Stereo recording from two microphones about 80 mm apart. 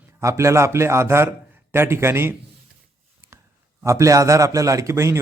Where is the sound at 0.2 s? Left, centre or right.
Right.